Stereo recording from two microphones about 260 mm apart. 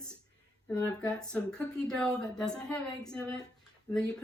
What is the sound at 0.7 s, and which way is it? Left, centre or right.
Speech, centre.